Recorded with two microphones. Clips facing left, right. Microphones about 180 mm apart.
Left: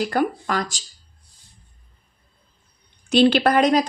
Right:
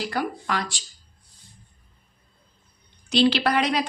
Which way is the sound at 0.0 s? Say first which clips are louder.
Left 6 dB; 50° left (ahead or behind).